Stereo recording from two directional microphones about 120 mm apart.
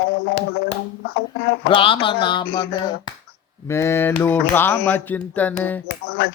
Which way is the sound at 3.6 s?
20° left (ahead or behind).